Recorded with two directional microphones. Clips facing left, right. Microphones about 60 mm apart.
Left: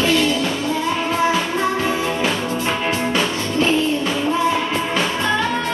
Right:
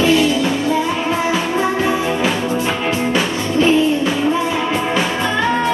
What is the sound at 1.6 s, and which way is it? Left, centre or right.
Music, centre.